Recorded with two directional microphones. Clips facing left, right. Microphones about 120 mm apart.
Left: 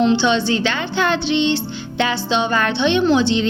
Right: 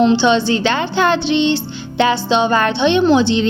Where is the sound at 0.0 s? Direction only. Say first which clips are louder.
Right 3 dB; 25° right (ahead or behind).